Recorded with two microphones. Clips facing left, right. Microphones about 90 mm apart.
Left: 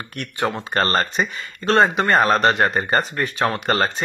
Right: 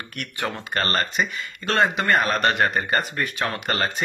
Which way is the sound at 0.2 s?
25° left (ahead or behind).